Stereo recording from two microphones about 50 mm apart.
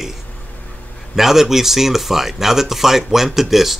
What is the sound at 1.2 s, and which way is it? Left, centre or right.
Speech, centre.